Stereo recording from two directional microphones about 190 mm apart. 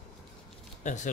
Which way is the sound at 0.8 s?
40° left (ahead or behind).